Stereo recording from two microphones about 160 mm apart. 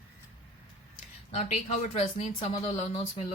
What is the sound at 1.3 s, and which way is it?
Speech, 45° left (ahead or behind).